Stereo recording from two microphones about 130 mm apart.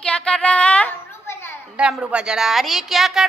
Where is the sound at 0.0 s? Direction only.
10° left (ahead or behind).